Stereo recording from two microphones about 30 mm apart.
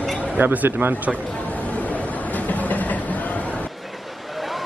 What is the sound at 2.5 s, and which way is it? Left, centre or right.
Train, left.